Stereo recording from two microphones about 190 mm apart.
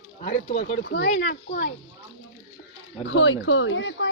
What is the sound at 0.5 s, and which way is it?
Speech, 65° left (ahead or behind).